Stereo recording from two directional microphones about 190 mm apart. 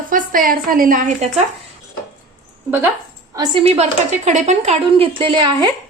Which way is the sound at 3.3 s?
30° right (ahead or behind).